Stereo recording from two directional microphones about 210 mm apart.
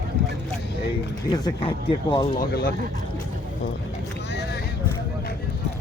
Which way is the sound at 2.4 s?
45° left (ahead or behind).